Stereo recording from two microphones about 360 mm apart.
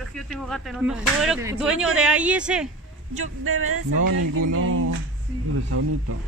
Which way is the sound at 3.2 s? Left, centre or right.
Right.